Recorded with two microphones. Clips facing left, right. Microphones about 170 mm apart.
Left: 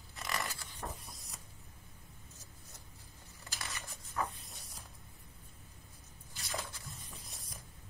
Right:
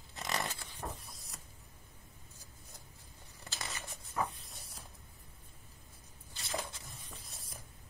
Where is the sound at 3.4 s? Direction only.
25° right (ahead or behind).